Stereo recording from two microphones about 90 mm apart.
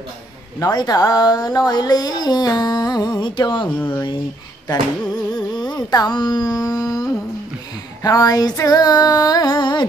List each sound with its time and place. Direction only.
0.6 s speech: 45° left (ahead or behind)
3.6 s speech: 20° left (ahead or behind)
4.6 s a sound: 50° left (ahead or behind)
5.7 s speech: 45° left (ahead or behind)